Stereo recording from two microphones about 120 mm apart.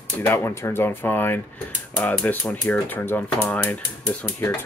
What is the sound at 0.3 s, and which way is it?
Speech, 25° left (ahead or behind).